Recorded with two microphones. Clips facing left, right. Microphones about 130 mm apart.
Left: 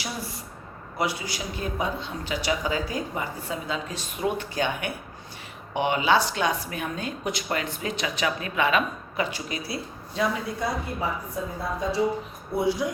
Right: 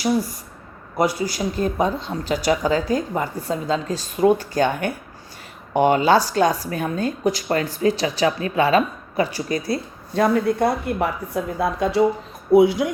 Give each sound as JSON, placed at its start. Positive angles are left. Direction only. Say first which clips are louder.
{"t": 0.0, "sound": "speech", "louder": "right 13 dB", "side_deg": -40}